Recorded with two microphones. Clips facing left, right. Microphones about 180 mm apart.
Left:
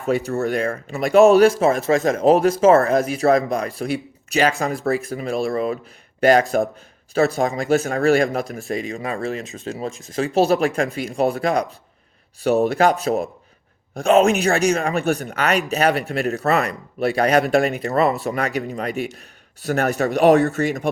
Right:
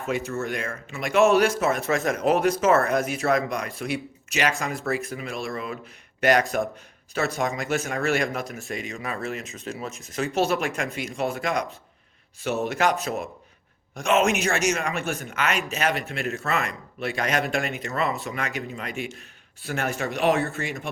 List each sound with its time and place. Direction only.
0.1 s speech: 35° left (ahead or behind)